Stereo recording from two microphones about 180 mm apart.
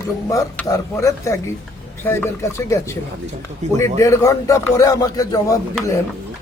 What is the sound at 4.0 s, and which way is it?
Speech, 15° left (ahead or behind).